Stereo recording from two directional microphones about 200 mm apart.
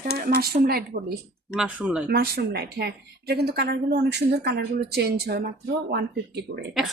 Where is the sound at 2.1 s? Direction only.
50° right (ahead or behind).